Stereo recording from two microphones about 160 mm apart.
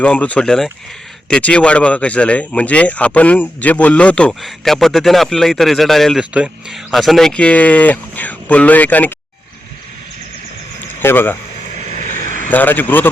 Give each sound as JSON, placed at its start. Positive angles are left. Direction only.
{"t": 0.0, "sound": "speech", "side_deg": 10}
{"t": 11.0, "sound": "speech", "side_deg": 15}
{"t": 11.9, "sound": "vehicle", "side_deg": 50}
{"t": 12.5, "sound": "speech", "side_deg": 10}